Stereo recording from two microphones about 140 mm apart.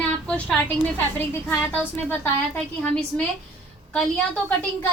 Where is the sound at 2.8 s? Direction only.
5° left (ahead or behind).